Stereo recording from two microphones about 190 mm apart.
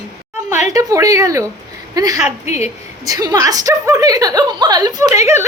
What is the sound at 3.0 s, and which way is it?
A woman's voice, 20° right (ahead or behind).